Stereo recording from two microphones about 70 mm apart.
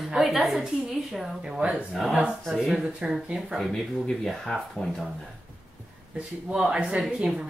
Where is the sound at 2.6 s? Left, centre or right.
Centre.